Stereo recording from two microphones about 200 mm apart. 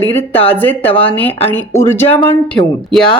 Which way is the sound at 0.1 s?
10° left (ahead or behind).